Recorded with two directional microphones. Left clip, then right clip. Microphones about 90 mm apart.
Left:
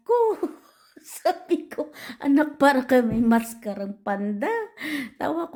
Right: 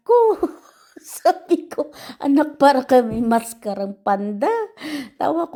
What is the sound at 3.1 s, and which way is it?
A woman's voice, 35° right (ahead or behind).